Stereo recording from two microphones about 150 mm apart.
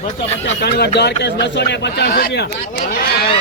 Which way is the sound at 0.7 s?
90° left.